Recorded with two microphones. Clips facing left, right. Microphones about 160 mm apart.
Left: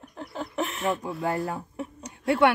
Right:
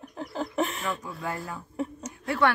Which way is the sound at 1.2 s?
35° left (ahead or behind).